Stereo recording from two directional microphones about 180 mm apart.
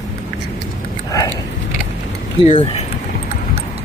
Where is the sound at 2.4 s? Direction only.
30° left (ahead or behind).